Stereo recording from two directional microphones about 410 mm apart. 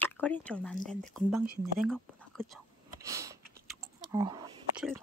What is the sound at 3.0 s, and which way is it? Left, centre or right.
Sniff, centre.